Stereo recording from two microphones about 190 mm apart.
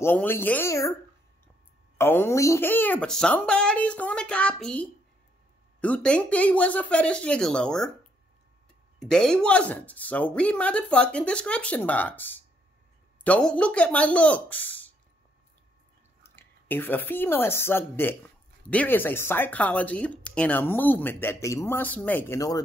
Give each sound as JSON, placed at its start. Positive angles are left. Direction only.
{"t": 0.0, "sound": "speech", "side_deg": 10}
{"t": 2.0, "sound": "speech", "side_deg": 10}
{"t": 9.0, "sound": "speech", "side_deg": 5}
{"t": 16.2, "sound": "speech", "side_deg": 10}